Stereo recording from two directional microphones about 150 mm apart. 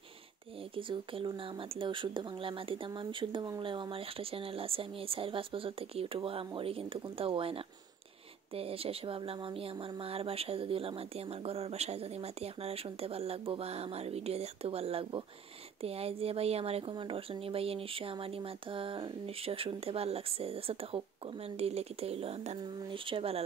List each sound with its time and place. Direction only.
0.7 s speech: 35° right (ahead or behind)